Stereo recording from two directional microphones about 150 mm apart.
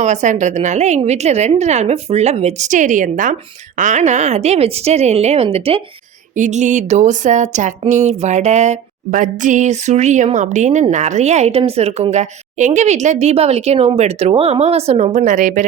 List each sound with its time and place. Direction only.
0.0 s speech: 50° right (ahead or behind)
6.3 s speech: 55° right (ahead or behind)